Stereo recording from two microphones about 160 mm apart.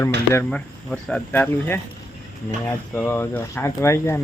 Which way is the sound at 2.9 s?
10° left (ahead or behind).